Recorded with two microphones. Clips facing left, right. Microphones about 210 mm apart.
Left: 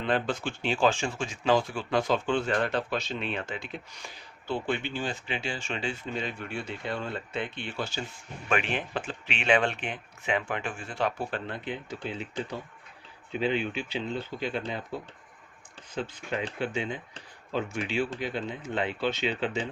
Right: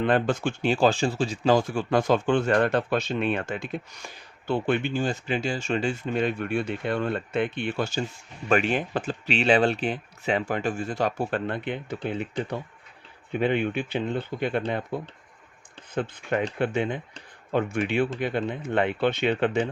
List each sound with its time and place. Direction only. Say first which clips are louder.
0.0 s speech: right 5 dB; 50° right (ahead or behind)
16.0 s speech: right 6 dB; 55° right (ahead or behind)